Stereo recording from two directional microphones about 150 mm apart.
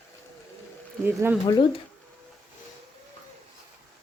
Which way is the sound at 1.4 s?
25° left (ahead or behind).